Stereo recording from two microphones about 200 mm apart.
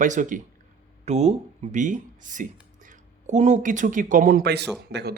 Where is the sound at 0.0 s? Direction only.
40° right (ahead or behind).